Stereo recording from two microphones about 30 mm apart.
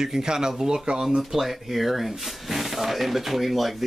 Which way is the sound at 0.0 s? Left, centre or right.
Centre.